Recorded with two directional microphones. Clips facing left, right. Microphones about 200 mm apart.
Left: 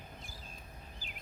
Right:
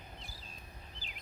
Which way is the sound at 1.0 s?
50° left (ahead or behind).